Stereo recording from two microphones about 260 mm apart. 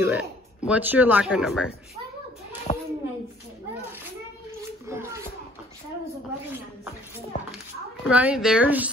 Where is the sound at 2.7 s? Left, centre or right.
Left.